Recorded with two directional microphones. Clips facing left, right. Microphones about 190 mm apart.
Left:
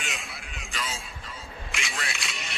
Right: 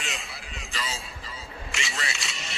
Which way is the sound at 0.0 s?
Centre (ahead or behind).